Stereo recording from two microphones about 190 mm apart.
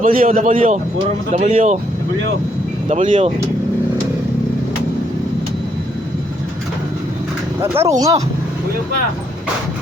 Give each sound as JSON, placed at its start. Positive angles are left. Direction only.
{"t": 0.0, "sound": "a man's voice", "side_deg": -45}
{"t": 2.9, "sound": "speech", "side_deg": -35}
{"t": 7.6, "sound": "speech", "side_deg": -15}